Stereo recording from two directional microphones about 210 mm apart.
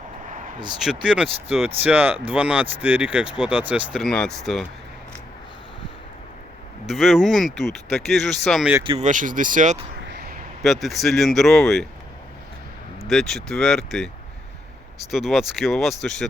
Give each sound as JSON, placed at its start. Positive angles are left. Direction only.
{"t": 1.0, "sound": "speech", "side_deg": -5}
{"t": 6.8, "sound": "speech", "side_deg": 0}
{"t": 8.8, "sound": "speech", "side_deg": -25}
{"t": 9.0, "sound": "speech", "side_deg": -40}
{"t": 10.1, "sound": "a sound", "side_deg": -45}
{"t": 10.6, "sound": "speech", "side_deg": 0}
{"t": 13.1, "sound": "speech", "side_deg": 0}
{"t": 15.1, "sound": "speech", "side_deg": 0}